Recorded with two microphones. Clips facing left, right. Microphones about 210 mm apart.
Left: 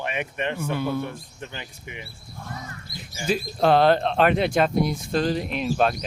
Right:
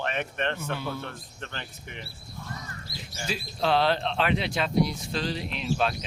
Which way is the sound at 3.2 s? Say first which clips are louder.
Left 7 dB; 50° left (ahead or behind).